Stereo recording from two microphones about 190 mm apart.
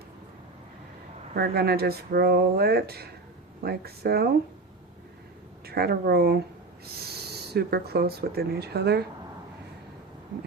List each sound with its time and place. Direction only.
1.4 s speech: 55° right (ahead or behind)
5.6 s speech: 55° right (ahead or behind)